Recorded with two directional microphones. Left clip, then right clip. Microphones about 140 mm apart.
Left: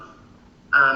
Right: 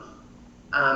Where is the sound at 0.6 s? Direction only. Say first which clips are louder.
Left 6 dB; 20° right (ahead or behind).